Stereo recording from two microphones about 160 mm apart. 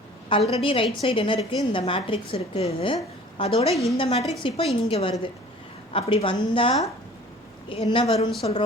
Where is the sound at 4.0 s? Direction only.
35° left (ahead or behind).